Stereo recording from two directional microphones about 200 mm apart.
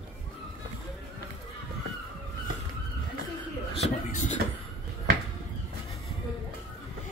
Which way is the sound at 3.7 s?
35° left (ahead or behind).